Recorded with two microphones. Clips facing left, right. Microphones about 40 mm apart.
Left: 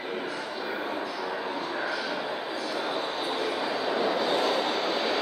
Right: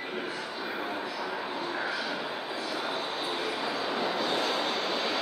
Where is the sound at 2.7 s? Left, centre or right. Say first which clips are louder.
Left 3 dB; centre.